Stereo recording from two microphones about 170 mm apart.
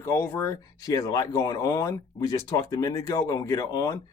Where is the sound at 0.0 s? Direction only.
15° left (ahead or behind).